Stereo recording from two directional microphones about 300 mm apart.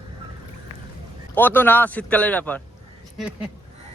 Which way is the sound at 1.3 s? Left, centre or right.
Centre.